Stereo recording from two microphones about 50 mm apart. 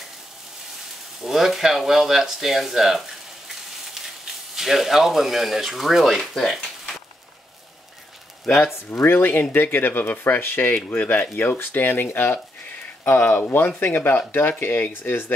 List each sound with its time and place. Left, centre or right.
1.2 s speech: centre
8.9 s speech: left